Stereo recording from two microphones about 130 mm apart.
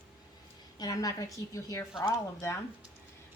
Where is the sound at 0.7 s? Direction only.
30° left (ahead or behind).